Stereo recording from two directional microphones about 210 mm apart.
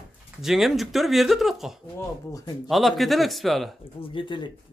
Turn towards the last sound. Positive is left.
turn(degrees=25)  # may be behind; listen again after turning